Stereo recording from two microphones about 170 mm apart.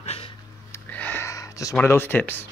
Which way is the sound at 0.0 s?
40° left (ahead or behind).